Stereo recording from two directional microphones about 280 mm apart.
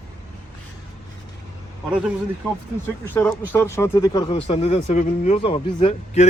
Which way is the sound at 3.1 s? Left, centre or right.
Centre.